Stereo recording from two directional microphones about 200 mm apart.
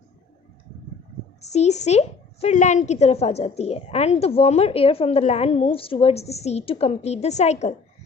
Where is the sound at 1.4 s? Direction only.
35° left (ahead or behind).